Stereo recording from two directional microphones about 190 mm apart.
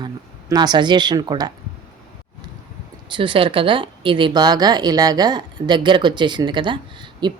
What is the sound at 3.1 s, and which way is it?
Speech, 25° right (ahead or behind).